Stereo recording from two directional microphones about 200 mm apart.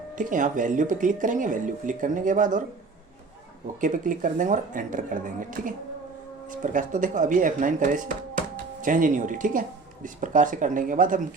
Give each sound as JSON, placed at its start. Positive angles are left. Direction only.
{"t": 0.2, "sound": "speech", "side_deg": -40}
{"t": 3.8, "sound": "speech", "side_deg": -40}